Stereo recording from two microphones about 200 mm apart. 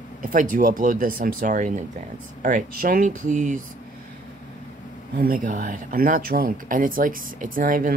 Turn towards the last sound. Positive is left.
turn(degrees=-45)  # may be behind; listen again after turning